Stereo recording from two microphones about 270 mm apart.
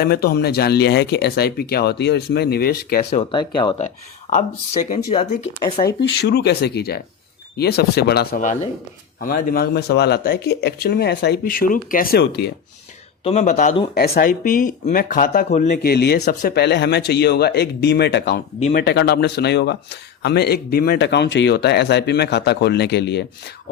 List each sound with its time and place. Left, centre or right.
0.0 s speech: left
3.2 s speech: centre
6.0 s speech: left
13.2 s speech: left